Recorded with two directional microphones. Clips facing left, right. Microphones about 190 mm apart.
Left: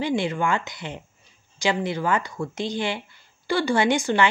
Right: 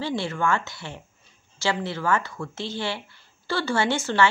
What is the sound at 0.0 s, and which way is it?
A woman's voice, 15° left (ahead or behind).